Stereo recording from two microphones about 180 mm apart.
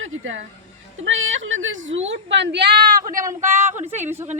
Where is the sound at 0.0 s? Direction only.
90° right.